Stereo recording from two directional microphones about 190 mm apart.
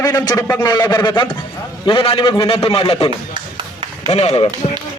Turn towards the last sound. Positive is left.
turn(degrees=30)  # may be behind; listen again after turning